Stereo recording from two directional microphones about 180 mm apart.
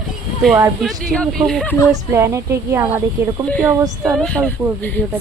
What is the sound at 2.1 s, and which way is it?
Speech, 15° right (ahead or behind).